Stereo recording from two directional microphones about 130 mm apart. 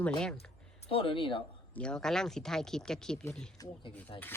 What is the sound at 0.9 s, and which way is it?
Speech, 45° left (ahead or behind).